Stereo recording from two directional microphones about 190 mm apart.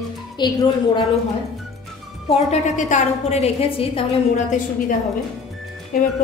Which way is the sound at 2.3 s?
35° left (ahead or behind).